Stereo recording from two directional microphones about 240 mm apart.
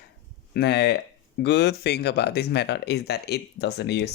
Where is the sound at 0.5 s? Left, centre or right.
Left.